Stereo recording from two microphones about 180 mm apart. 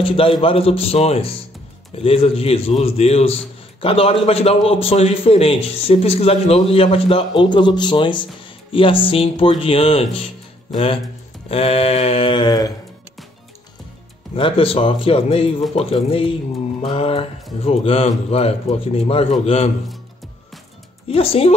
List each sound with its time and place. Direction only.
0.0 s a man's voice: 30° left (ahead or behind)
11.4 s a man's voice: 35° left (ahead or behind)
14.3 s a man's voice: 30° left (ahead or behind)
21.1 s a man's voice: 30° left (ahead or behind)